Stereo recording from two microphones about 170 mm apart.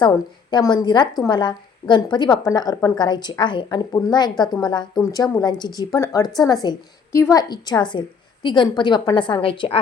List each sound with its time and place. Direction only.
0.5 s a woman's voice: 25° left (ahead or behind)
6.2 s a woman's voice: centre (ahead or behind)
6.5 s a woman's voice: 20° left (ahead or behind)